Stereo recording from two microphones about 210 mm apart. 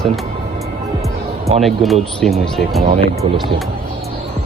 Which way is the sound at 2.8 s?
30° right (ahead or behind).